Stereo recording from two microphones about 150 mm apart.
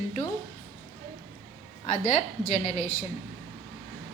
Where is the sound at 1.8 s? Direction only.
50° left (ahead or behind).